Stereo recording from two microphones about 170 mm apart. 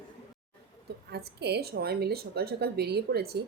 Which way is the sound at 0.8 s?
70° right (ahead or behind).